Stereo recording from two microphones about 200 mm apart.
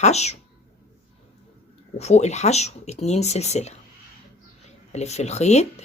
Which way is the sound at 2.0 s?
35° left (ahead or behind).